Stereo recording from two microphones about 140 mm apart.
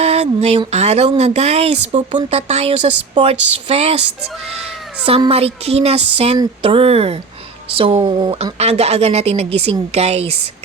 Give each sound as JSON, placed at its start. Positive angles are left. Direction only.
{"t": 0.0, "sound": "a sound", "side_deg": -50}
{"t": 0.7, "sound": "a woman's voice", "side_deg": -50}
{"t": 8.5, "sound": "a woman's voice", "side_deg": -50}